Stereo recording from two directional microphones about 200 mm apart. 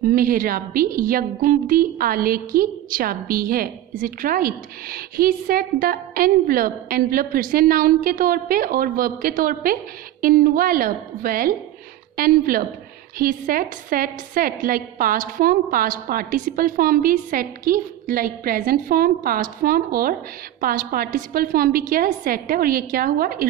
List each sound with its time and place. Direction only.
0.0 s a woman's voice: 45° right (ahead or behind)